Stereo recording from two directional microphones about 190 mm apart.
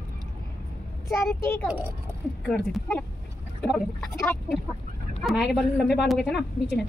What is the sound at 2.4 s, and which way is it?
A woman's voice, 5° left (ahead or behind).